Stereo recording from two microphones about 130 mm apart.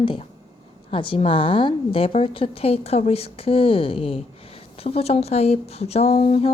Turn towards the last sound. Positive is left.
turn(degrees=50)  # may be behind; listen again after turning